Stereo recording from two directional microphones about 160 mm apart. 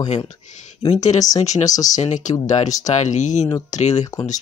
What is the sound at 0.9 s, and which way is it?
Speech, 45° left (ahead or behind).